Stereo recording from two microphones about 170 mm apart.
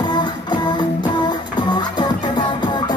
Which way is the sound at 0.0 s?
25° left (ahead or behind).